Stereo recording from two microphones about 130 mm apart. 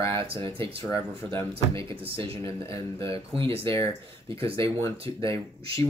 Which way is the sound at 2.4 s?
25° left (ahead or behind).